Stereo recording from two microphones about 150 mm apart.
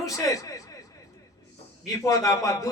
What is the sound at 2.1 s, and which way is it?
Speech, 20° left (ahead or behind).